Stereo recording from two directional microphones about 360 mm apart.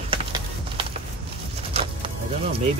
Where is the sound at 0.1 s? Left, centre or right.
Centre.